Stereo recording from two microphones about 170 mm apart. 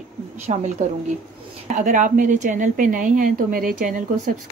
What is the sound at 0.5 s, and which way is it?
Speech, 35° right (ahead or behind).